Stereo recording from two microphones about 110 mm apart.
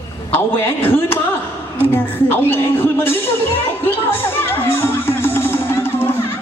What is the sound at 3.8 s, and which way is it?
Music, 20° left (ahead or behind).